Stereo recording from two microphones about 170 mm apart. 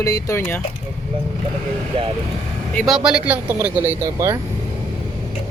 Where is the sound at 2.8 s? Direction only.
Centre (ahead or behind); by 4.4 s 20° right (ahead or behind).